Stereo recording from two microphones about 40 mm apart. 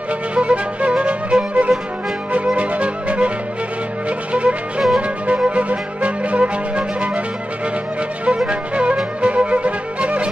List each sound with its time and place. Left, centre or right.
0.3 s music: right
4.3 s music: right
8.5 s music: right